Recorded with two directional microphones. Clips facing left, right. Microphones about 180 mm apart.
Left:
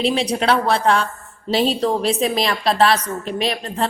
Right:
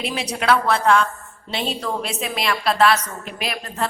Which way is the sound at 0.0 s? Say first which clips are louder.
Left 6 dB; 30° left (ahead or behind).